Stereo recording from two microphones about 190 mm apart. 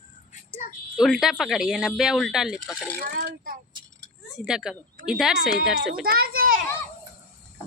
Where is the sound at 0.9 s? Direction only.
Centre (ahead or behind).